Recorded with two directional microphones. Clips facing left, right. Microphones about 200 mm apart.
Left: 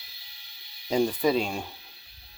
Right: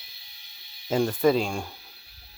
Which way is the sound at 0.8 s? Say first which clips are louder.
Right 2 dB; centre (ahead or behind).